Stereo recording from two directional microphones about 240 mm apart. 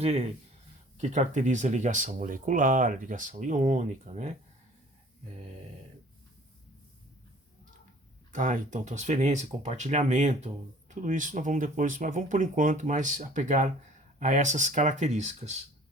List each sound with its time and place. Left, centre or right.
0.9 s speech: right
8.3 s speech: right